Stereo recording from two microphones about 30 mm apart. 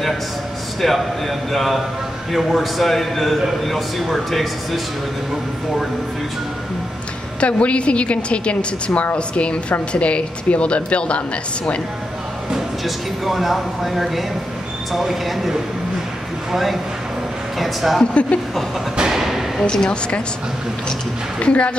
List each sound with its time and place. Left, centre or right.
0.7 s speech: centre
7.3 s a woman's voice: left
12.8 s speech: centre
17.6 s speech: centre
19.0 s thump: centre
19.6 s a woman's voice: left
21.4 s speech: left